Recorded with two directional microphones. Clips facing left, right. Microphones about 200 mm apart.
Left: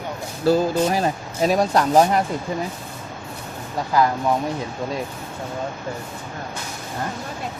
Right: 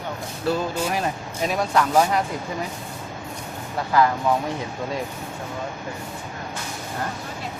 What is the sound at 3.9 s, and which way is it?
Speech, 15° left (ahead or behind).